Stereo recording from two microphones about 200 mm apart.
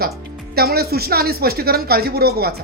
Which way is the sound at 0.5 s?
50° right (ahead or behind).